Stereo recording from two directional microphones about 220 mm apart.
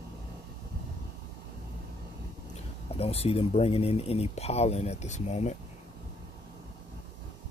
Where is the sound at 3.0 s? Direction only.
25° left (ahead or behind).